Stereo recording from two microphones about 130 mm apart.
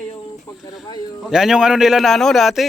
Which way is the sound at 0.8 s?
30° left (ahead or behind).